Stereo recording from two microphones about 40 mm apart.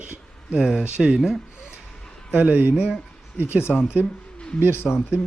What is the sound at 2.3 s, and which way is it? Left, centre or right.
Speech, right.